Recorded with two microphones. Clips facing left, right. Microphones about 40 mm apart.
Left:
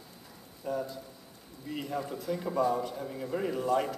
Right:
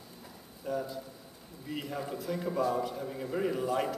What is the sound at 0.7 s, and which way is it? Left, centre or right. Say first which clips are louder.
A man's voice: even; centre.